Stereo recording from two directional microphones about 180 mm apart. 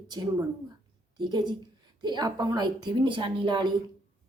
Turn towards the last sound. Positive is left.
turn(degrees=-25)  # may be behind; listen again after turning